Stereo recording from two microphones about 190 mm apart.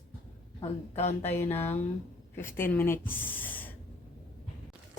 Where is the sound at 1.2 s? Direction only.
10° left (ahead or behind).